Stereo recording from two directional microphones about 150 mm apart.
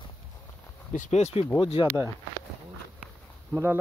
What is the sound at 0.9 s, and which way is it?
Speech, 55° left (ahead or behind).